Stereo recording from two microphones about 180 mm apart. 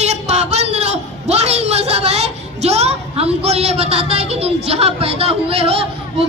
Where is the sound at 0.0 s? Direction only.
40° right (ahead or behind).